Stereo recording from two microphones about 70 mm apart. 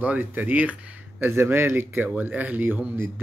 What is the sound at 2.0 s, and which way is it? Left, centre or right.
Speech, right.